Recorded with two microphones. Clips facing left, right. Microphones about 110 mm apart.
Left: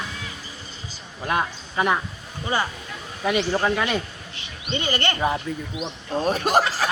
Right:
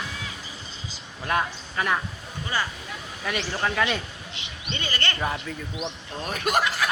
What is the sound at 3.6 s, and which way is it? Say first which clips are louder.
A man's voice: left 3 dB; 10° left (ahead or behind).